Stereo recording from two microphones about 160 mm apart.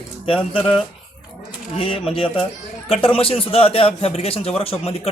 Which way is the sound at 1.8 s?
35° left (ahead or behind).